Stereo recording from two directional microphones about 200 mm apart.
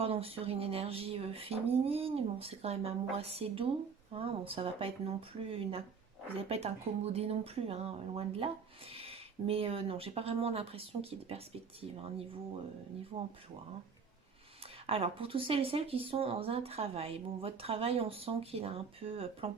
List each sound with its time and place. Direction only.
0.0 s speech: 30° right (ahead or behind)
14.8 s speech: 30° right (ahead or behind)